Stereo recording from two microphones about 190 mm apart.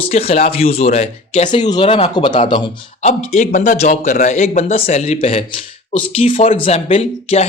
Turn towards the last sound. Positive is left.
turn(degrees=35)  # may be behind; listen again after turning